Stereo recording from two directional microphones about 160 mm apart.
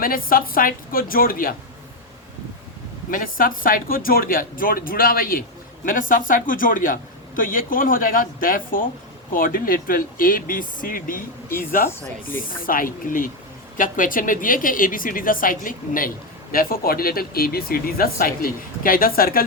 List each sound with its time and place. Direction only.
0.0 s speech: 65° left (ahead or behind)
3.1 s speech: 60° left (ahead or behind)